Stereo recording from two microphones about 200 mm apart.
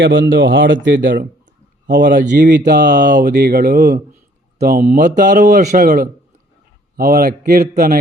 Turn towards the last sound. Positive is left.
turn(degrees=-50)  # may be behind; listen again after turning